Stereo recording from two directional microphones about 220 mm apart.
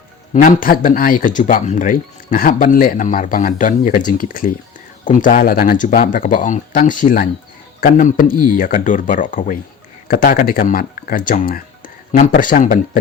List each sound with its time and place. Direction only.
0.4 s speech: 40° left (ahead or behind)